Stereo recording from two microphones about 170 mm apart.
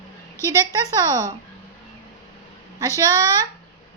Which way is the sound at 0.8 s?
20° right (ahead or behind).